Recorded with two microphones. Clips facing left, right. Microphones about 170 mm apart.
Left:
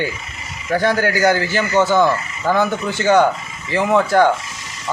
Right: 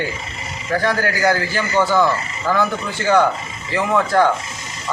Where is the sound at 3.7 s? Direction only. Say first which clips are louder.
Left 2 dB; 20° left (ahead or behind).